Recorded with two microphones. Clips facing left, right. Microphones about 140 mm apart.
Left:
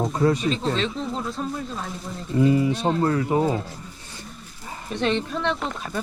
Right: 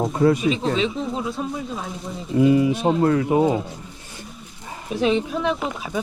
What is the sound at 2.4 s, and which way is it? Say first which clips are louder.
Speech: right 3 dB; 15° right (ahead or behind).